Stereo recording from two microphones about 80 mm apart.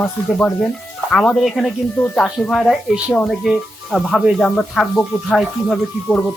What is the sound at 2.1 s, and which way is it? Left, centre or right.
Speech, centre.